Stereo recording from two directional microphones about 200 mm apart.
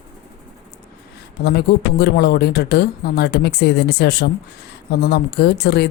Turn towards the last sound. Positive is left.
turn(degrees=55)  # may be behind; listen again after turning